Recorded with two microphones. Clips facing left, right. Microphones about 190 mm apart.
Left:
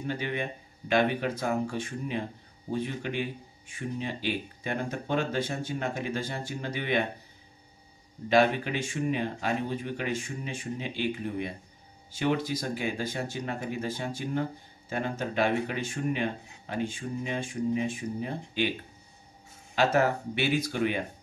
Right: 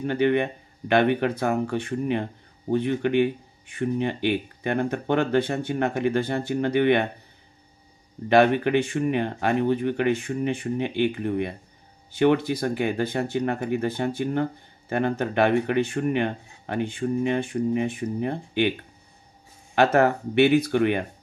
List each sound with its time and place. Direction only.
0.0 s speech: 65° right (ahead or behind)
8.3 s speech: 60° right (ahead or behind)
19.7 s speech: 60° right (ahead or behind)